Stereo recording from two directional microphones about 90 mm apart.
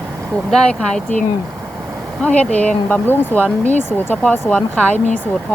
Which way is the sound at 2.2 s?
15° left (ahead or behind).